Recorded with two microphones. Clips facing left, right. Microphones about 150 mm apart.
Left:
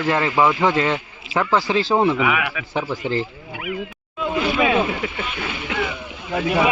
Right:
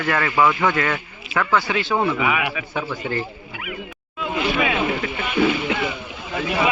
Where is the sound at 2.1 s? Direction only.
Centre (ahead or behind).